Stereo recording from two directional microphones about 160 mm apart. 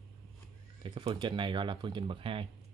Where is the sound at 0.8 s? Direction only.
30° right (ahead or behind).